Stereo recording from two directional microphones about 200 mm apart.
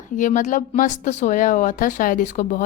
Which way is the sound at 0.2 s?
40° left (ahead or behind).